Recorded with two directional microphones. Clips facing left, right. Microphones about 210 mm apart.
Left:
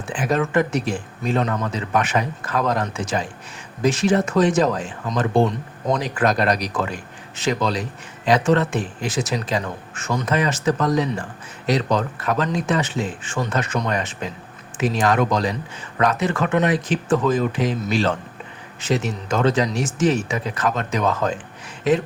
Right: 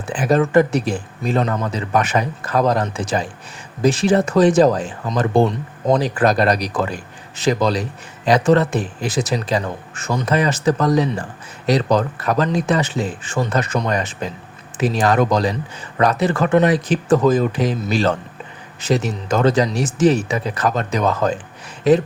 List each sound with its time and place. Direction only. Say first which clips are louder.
0.1 s a man's voice: right 5 dB; 35° right (ahead or behind)